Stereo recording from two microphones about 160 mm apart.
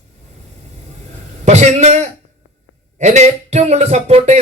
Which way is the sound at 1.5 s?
45° right (ahead or behind).